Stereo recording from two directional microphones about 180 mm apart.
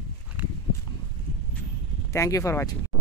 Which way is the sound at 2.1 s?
15° left (ahead or behind).